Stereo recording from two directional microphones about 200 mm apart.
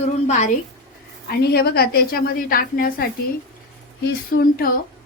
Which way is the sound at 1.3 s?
50° left (ahead or behind).